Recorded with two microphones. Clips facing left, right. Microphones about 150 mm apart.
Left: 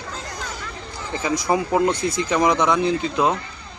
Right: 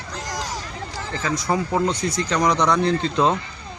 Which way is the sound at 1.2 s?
15° left (ahead or behind).